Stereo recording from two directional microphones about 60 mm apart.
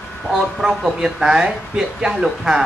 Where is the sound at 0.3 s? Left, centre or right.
Centre.